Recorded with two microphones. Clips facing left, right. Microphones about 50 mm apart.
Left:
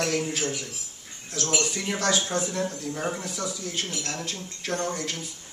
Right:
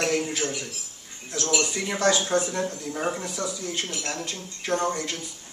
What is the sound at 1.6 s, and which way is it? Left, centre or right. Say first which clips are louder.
A man's voice: right 3 dB; centre.